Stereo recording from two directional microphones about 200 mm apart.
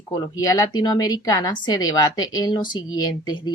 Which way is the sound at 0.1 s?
20° left (ahead or behind).